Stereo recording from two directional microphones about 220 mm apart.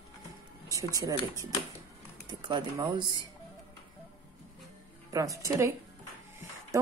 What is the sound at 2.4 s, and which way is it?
Speech, 20° right (ahead or behind).